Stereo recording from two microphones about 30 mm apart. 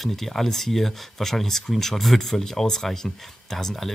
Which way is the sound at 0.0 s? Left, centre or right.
Centre.